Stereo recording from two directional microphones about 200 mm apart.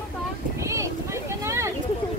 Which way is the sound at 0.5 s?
15° right (ahead or behind).